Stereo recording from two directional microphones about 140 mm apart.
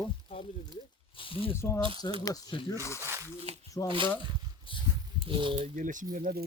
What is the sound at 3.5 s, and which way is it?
Speech, 50° right (ahead or behind).